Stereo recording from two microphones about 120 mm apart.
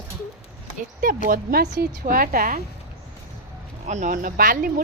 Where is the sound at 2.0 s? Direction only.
90° right.